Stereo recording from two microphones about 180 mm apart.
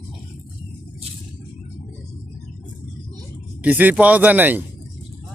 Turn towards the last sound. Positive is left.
turn(degrees=-10)  # may be behind; listen again after turning